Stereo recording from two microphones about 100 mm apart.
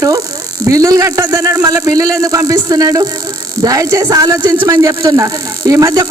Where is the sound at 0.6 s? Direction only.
35° right (ahead or behind).